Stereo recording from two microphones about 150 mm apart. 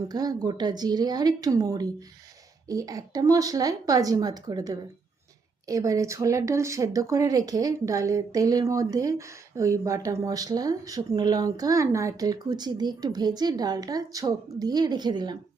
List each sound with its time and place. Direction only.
0.1 s speech: 25° right (ahead or behind)